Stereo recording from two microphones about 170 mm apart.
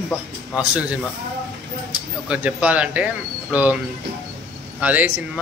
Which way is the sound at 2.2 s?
5° right (ahead or behind).